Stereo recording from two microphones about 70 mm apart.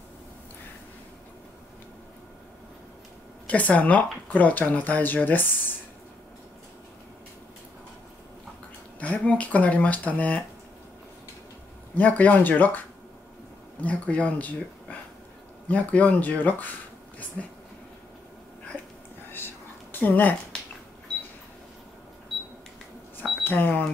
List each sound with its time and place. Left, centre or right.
3.4 s speech: left
9.0 s speech: centre
11.9 s speech: left
17.4 s speech: centre
19.3 s a sound: left
23.4 s speech: left